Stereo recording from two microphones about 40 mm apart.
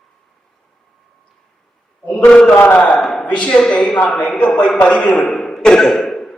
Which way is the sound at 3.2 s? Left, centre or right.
Left.